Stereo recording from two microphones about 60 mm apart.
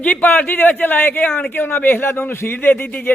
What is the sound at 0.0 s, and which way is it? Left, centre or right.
A man's voice, left.